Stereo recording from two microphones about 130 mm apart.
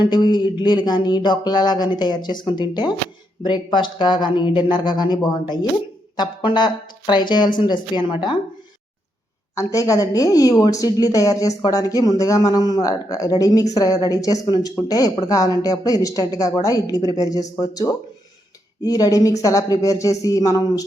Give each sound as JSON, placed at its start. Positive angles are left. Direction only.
{"t": 0.0, "sound": "music", "side_deg": 35}
{"t": 9.6, "sound": "a woman's voice", "side_deg": 25}